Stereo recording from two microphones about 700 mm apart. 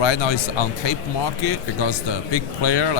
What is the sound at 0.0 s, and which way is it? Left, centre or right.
Speech, left.